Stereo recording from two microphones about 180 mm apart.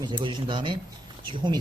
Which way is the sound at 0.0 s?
25° right (ahead or behind).